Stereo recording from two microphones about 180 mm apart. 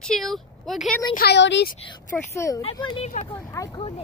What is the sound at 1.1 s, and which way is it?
Speech, 65° left (ahead or behind).